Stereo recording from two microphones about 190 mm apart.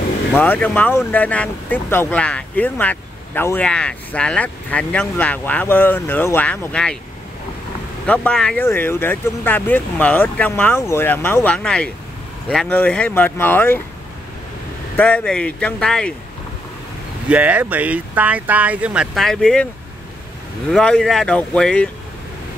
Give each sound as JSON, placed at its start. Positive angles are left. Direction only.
{"t": 0.3, "sound": "speech", "side_deg": 10}
{"t": 8.1, "sound": "speech", "side_deg": 5}
{"t": 15.0, "sound": "speech", "side_deg": 5}
{"t": 17.3, "sound": "speech", "side_deg": -5}
{"t": 20.7, "sound": "speech", "side_deg": 5}